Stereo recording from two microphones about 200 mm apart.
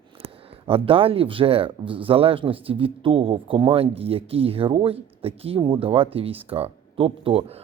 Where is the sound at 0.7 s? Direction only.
25° right (ahead or behind).